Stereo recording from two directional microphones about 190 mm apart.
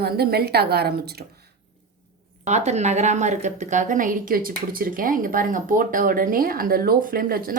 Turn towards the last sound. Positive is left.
turn(degrees=-50)  # may be behind; listen again after turning